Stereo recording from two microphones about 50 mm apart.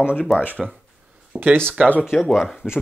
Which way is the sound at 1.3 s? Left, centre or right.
Right.